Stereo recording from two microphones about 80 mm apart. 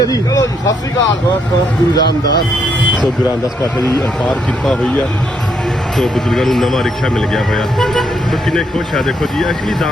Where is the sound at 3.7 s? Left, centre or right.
Centre.